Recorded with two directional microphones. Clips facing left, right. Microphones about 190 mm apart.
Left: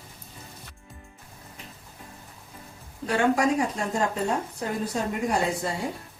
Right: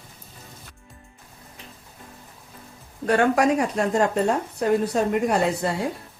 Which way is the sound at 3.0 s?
60° right (ahead or behind).